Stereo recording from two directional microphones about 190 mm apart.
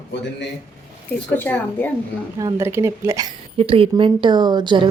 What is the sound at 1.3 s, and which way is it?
Speech, 10° left (ahead or behind).